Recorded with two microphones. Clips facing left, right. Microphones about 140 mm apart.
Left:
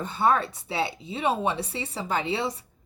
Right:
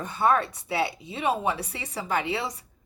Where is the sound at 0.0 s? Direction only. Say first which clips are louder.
Even; 25° left (ahead or behind).